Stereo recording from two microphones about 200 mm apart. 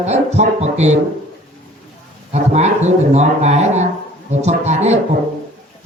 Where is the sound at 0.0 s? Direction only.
35° right (ahead or behind).